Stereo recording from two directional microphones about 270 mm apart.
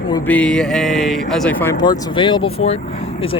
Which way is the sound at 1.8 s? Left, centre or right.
Centre.